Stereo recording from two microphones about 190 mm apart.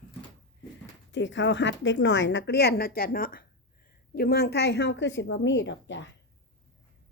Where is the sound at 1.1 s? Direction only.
70° left (ahead or behind).